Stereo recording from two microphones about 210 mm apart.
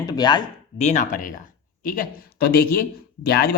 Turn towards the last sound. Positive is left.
turn(degrees=50)  # may be behind; listen again after turning